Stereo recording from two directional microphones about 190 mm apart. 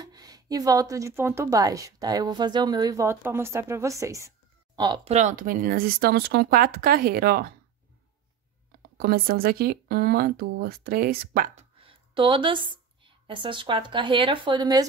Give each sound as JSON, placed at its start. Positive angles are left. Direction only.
{"t": 0.0, "sound": "a woman's voice", "side_deg": -20}
{"t": 5.1, "sound": "speech", "side_deg": -45}
{"t": 8.9, "sound": "speech", "side_deg": -55}
{"t": 11.8, "sound": "speech", "side_deg": -25}